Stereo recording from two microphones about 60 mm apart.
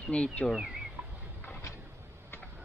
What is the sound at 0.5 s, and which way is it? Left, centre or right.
Speech, centre.